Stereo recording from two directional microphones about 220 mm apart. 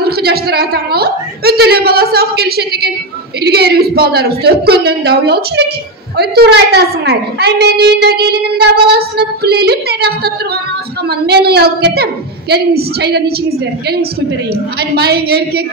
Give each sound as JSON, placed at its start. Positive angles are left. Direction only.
{"t": 0.0, "sound": "a woman's voice", "side_deg": -45}
{"t": 14.5, "sound": "a woman's voice", "side_deg": -45}